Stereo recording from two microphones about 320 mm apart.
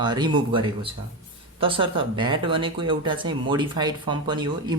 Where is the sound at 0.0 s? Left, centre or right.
Centre.